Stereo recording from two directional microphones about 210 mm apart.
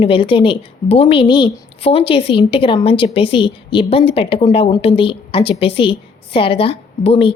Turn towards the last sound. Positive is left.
turn(degrees=30)  # may be behind; listen again after turning